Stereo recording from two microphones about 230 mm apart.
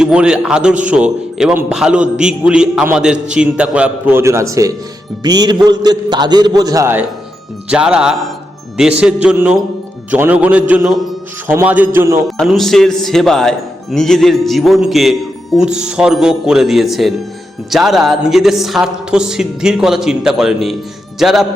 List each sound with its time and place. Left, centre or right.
0.0 s a man's voice: centre
12.4 s a man's voice: centre